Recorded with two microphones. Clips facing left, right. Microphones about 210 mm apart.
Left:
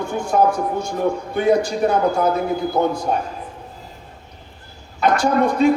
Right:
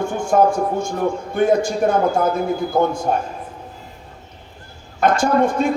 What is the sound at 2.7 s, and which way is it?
Speech, 50° right (ahead or behind).